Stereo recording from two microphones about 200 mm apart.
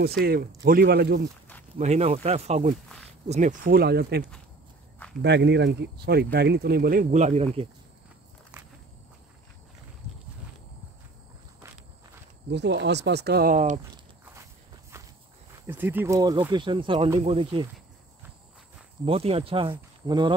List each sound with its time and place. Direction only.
0.2 s speech: 50° right (ahead or behind)
1.8 s speech: 35° right (ahead or behind); by 4.2 s 55° right (ahead or behind)
5.2 s speech: 60° right (ahead or behind); by 7.6 s 30° right (ahead or behind)
12.4 s speech: 60° right (ahead or behind); by 13.7 s 40° right (ahead or behind)
14.2 s walk: 15° right (ahead or behind)
15.6 s speech: 10° right (ahead or behind); by 17.6 s 25° right (ahead or behind)
19.0 s speech: 30° right (ahead or behind)